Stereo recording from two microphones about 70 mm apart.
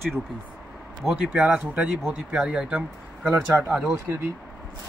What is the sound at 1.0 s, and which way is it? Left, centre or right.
Speech, centre.